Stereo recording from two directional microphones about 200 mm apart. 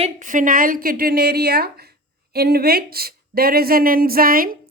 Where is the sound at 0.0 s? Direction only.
40° right (ahead or behind).